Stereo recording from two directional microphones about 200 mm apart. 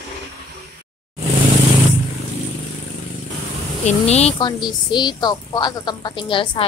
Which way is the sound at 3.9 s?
30° left (ahead or behind).